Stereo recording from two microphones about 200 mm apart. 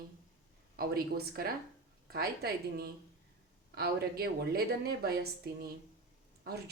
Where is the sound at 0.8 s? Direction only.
50° right (ahead or behind).